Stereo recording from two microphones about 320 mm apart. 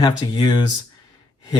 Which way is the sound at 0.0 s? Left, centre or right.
Centre.